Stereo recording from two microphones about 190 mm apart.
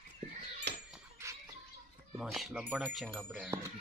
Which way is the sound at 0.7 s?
60° right (ahead or behind).